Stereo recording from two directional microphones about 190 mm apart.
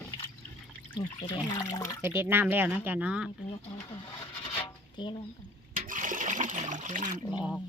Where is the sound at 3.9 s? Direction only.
20° left (ahead or behind).